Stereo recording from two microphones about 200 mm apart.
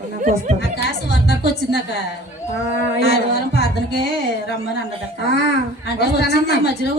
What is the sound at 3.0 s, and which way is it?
Speech, 55° left (ahead or behind).